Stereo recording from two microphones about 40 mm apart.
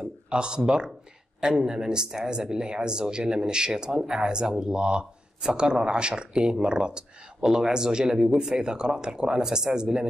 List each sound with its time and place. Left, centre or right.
0.3 s speech: right